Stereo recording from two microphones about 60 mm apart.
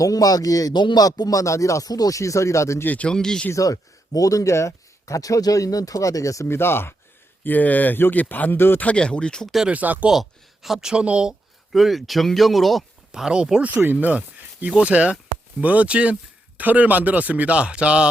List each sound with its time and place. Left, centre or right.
0.0 s speech: left
2.8 s speech: left
3.1 s speech: centre
3.5 s speech: left
6.5 s speech: left
7.4 s speech: left
8.8 s speech: left
9.6 s speech: right
10.1 s speech: centre
11.7 s speech: centre
13.1 s speech: centre